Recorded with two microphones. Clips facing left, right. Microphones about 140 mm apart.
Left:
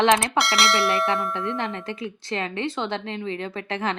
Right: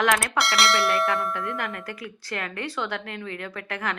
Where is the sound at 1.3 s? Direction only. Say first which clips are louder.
Left 3 dB; 25° left (ahead or behind).